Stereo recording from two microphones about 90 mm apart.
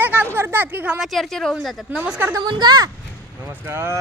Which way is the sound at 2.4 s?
55° right (ahead or behind).